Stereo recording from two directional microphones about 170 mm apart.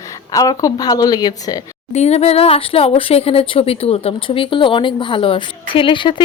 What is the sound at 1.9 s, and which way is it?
Speech, 40° left (ahead or behind).